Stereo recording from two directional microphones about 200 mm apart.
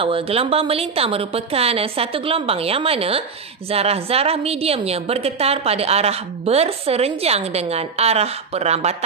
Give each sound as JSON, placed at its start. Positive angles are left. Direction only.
{"t": 0.0, "sound": "a woman's voice", "side_deg": -30}